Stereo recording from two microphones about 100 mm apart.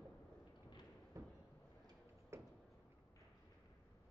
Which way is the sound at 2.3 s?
25° right (ahead or behind).